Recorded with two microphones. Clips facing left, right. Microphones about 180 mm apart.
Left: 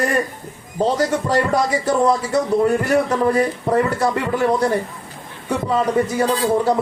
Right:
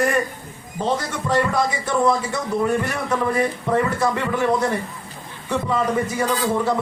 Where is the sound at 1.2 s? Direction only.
40° left (ahead or behind).